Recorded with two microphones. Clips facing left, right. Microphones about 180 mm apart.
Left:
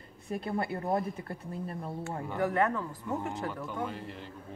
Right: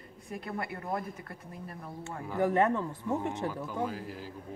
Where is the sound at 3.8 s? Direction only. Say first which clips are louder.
Right 2 dB; 5° right (ahead or behind).